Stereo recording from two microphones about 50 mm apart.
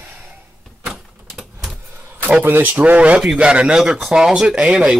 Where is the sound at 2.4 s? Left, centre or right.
Right.